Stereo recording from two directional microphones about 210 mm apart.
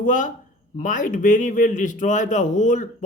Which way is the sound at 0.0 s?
40° left (ahead or behind).